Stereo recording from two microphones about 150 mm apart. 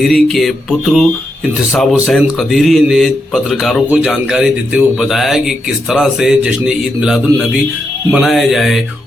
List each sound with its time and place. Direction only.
0.0 s speech: centre (ahead or behind)